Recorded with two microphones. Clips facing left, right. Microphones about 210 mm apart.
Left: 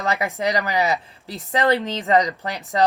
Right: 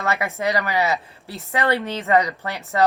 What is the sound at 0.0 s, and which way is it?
Speech, 15° left (ahead or behind).